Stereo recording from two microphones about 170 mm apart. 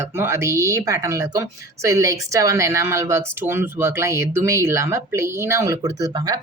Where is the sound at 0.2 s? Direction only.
15° right (ahead or behind).